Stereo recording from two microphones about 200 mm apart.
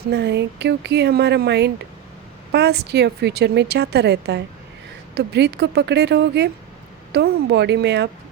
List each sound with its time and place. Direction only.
0.1 s speech: 55° right (ahead or behind)